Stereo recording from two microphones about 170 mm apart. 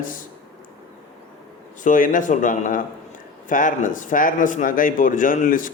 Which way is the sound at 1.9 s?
50° left (ahead or behind).